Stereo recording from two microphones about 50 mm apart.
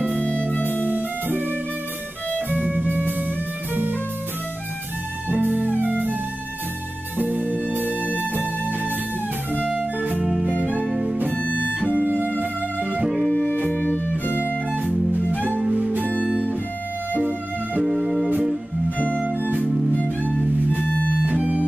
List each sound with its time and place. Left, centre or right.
0.1 s music: left
0.8 s music: right
2.5 s music: right
5.4 s music: right
7.2 s music: right
11.2 s music: left
11.8 s music: right
12.8 s music: right
13.5 s music: left
15.7 s music: right
17.8 s music: centre
18.9 s music: left
21.3 s music: right